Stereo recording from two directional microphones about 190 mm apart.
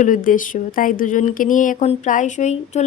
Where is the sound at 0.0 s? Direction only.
45° left (ahead or behind).